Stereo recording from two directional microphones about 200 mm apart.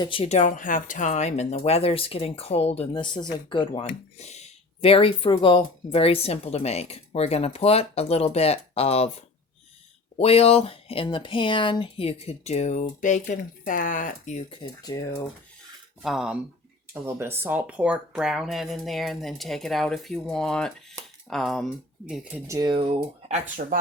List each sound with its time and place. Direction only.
0.0 s speech: 25° left (ahead or behind)
10.2 s speech: 30° left (ahead or behind)
14.8 s speech: 20° left (ahead or behind)
16.0 s speech: 5° right (ahead or behind)
22.4 s speech: 20° right (ahead or behind)